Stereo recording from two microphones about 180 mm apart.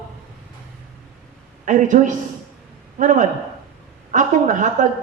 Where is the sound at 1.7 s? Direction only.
45° right (ahead or behind).